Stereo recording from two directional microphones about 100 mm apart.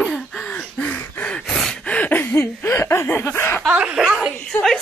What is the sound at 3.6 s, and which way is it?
Speech, 10° right (ahead or behind).